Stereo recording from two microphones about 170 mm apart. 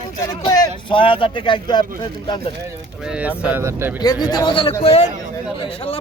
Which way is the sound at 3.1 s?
10° right (ahead or behind).